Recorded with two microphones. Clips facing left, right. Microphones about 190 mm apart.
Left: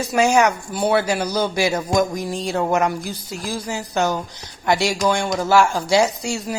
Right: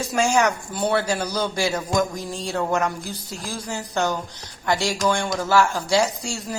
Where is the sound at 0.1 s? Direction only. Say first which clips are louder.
Left 4 dB; 10° left (ahead or behind).